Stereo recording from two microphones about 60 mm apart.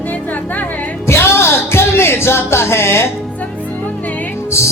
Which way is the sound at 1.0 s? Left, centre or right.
Left.